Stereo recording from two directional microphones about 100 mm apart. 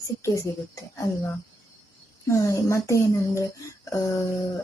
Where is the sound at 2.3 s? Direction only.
30° left (ahead or behind).